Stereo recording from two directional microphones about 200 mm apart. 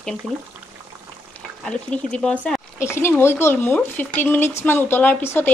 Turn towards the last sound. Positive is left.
turn(degrees=10)  # may be behind; listen again after turning